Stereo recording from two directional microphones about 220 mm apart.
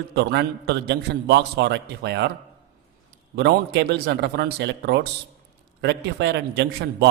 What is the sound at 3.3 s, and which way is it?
A man's voice, 50° right (ahead or behind).